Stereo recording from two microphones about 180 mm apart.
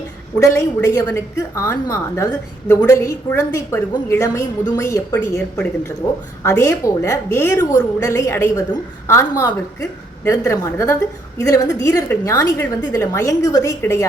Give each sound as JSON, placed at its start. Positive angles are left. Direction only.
{"t": 0.3, "sound": "a woman's voice", "side_deg": 15}